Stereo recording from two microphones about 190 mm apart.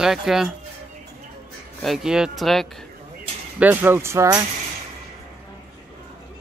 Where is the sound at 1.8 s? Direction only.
Centre (ahead or behind).